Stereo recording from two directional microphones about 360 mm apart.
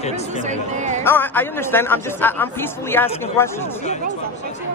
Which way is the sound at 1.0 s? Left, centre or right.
Centre.